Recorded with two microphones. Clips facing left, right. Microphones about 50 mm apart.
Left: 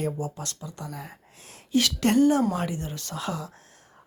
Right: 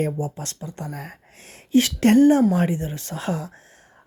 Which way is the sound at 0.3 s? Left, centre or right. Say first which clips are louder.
Right 4 dB; right.